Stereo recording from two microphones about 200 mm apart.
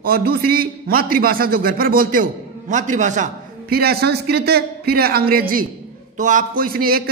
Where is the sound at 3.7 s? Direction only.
50° right (ahead or behind).